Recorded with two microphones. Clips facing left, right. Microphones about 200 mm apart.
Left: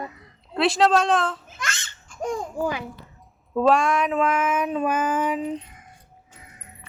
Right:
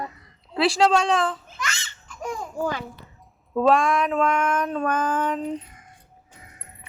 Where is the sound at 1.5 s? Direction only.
50° left (ahead or behind).